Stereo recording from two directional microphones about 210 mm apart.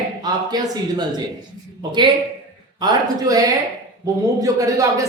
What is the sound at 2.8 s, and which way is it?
Speech, 15° right (ahead or behind).